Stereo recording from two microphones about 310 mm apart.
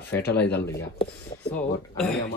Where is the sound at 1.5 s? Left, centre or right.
Centre.